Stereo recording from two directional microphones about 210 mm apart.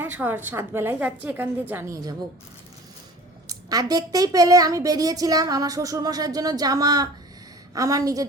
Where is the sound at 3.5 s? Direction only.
15° right (ahead or behind).